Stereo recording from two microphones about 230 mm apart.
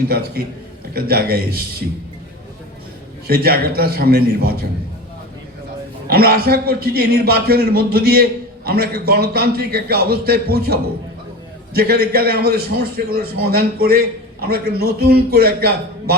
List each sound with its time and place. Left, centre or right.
0.9 s a man's voice: right
3.2 s a man's voice: right
6.1 s a man's voice: right